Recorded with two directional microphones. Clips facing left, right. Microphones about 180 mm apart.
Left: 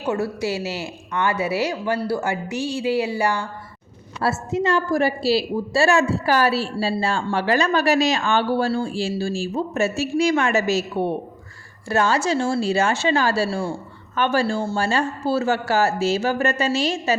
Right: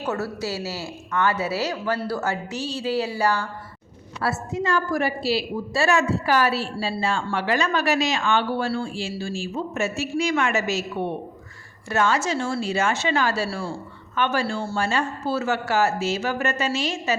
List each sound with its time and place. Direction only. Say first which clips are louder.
0.0 s a woman's voice: left 4 dB; 15° left (ahead or behind)
4.2 s a woman's voice: left 4 dB; 25° left (ahead or behind)